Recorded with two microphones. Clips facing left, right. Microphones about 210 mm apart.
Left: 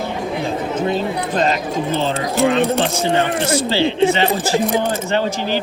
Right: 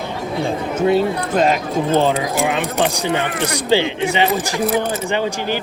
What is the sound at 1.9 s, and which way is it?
Speech, 50° right (ahead or behind).